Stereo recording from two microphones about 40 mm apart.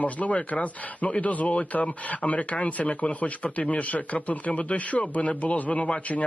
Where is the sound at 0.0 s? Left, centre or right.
Left.